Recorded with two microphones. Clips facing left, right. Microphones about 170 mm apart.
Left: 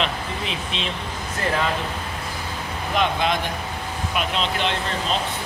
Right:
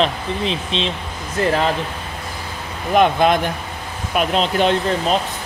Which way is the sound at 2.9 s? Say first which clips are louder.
Right 8 dB; 50° right (ahead or behind).